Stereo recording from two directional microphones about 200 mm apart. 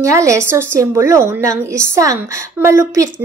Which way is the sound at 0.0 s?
15° right (ahead or behind).